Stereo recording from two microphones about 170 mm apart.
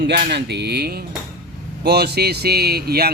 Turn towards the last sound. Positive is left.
turn(degrees=-65)  # may be behind; listen again after turning